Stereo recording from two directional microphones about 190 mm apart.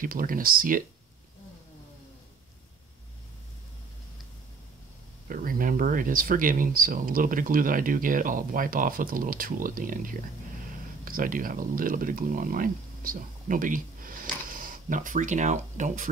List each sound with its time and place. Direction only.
0.0 s speech: 45° right (ahead or behind)
5.3 s speech: 45° right (ahead or behind)